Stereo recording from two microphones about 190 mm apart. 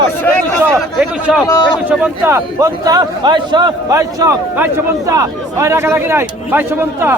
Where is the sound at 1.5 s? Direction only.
20° left (ahead or behind).